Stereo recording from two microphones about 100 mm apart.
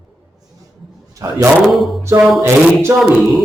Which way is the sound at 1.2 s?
30° right (ahead or behind).